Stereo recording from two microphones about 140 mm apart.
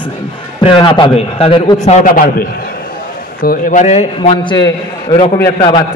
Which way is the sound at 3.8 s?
50° left (ahead or behind).